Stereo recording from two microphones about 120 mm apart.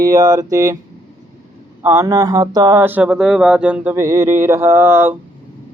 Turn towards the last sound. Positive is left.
turn(degrees=-20)  # may be behind; listen again after turning